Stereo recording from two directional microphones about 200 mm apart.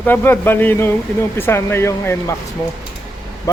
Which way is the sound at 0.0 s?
10° left (ahead or behind).